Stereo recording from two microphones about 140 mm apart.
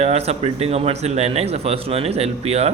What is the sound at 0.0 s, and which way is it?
Speech, 50° right (ahead or behind).